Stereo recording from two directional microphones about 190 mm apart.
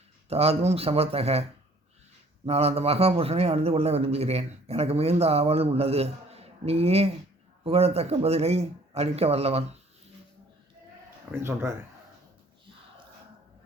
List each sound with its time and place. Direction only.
0.3 s a man's voice: 30° right (ahead or behind)
2.5 s a man's voice: 35° right (ahead or behind)
11.3 s speech: 15° right (ahead or behind)